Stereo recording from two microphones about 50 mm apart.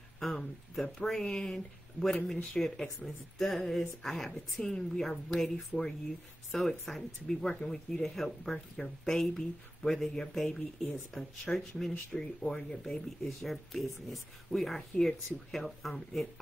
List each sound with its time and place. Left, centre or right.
0.2 s a woman's voice: centre
7.4 s a woman's voice: centre
8.0 s a woman's voice: centre
13.5 s speech: centre